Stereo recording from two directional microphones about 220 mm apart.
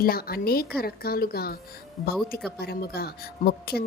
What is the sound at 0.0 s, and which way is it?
A woman's voice, 45° left (ahead or behind).